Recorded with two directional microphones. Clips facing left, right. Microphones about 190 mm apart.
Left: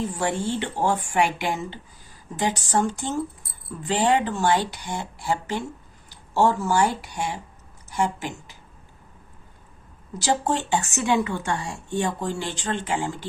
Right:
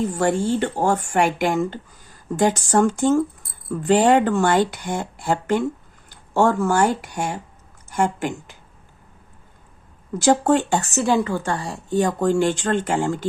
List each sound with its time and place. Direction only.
0.0 s a woman's voice: 45° right (ahead or behind)
10.2 s a woman's voice: 55° right (ahead or behind)